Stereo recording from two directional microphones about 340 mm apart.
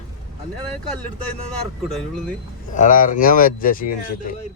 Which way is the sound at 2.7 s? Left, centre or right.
Left.